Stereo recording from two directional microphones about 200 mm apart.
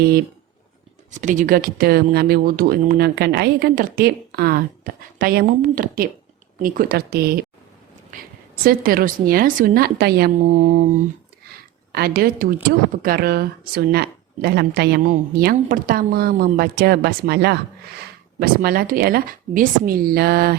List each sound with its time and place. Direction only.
1.1 s speech: 40° right (ahead or behind)
11.9 s speech: 50° right (ahead or behind)